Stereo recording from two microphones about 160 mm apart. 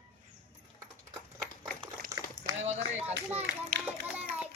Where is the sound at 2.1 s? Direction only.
20° right (ahead or behind).